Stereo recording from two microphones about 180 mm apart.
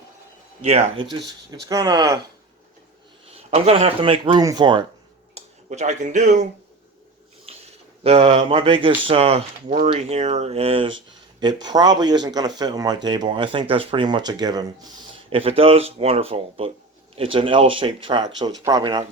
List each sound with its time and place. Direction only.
0.6 s speech: 35° right (ahead or behind)
1.6 s speech: 20° right (ahead or behind)
3.5 s speech: 35° right (ahead or behind)
5.3 s speech: 40° right (ahead or behind)
7.5 s a sound: 35° right (ahead or behind)
8.0 s speech: 30° right (ahead or behind)